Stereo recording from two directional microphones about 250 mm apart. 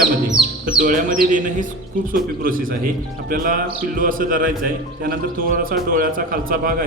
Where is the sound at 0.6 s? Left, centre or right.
Right.